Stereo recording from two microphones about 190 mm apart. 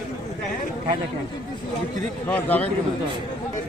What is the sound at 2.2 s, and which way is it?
Speech, 10° left (ahead or behind).